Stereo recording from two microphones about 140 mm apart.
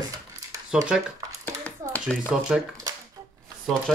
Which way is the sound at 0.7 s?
5° right (ahead or behind).